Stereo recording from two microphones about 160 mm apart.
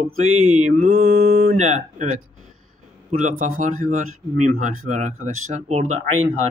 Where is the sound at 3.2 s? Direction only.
50° right (ahead or behind).